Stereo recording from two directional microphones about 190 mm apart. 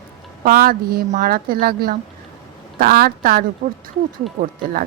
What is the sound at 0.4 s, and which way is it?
A woman's voice, 50° right (ahead or behind).